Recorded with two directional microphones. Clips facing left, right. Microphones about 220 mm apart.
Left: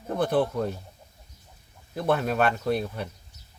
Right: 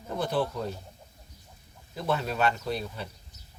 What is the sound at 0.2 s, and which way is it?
Speech, 55° left (ahead or behind).